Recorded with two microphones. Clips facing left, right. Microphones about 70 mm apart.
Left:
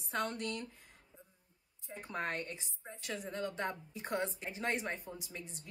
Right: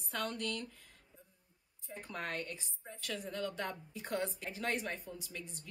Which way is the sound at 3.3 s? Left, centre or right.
Left.